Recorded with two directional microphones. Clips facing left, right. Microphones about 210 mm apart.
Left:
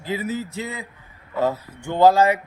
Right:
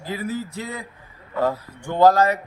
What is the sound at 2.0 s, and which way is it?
Speech, 10° left (ahead or behind).